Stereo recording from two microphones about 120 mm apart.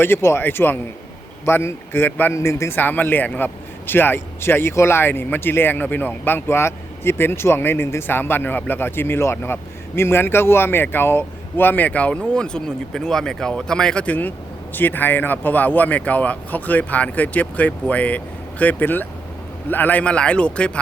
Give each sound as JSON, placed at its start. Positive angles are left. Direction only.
{"t": 0.0, "sound": "a man's voice", "side_deg": 20}